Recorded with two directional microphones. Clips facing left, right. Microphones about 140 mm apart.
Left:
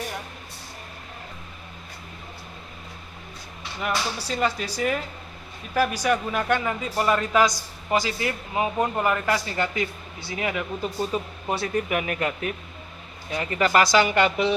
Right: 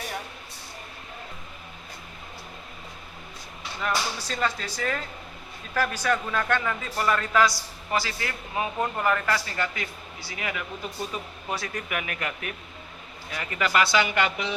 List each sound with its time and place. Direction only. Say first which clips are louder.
3.8 s speech: left 1 dB; 15° left (ahead or behind); by 14.5 s 35° left (ahead or behind)